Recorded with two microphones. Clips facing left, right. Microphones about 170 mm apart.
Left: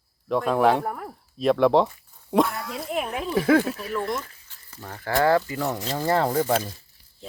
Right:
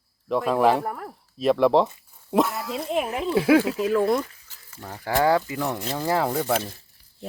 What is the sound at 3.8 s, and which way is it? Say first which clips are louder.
Speech: right 8 dB; 90° right.